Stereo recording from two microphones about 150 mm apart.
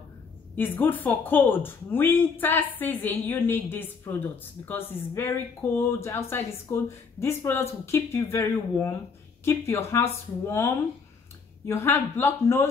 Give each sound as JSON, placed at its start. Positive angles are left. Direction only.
{"t": 0.6, "sound": "speech", "side_deg": 15}